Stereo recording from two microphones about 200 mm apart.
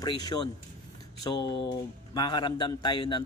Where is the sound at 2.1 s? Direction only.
20° left (ahead or behind).